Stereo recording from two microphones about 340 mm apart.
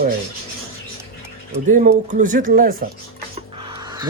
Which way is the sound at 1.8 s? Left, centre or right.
Right.